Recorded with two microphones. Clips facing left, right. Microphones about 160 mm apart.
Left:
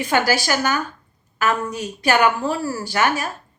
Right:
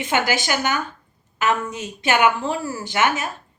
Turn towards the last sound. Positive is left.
turn(degrees=-20)  # may be behind; listen again after turning